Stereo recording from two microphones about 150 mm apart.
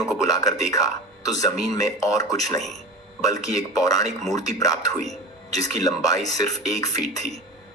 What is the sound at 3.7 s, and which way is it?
A man's voice, 25° left (ahead or behind).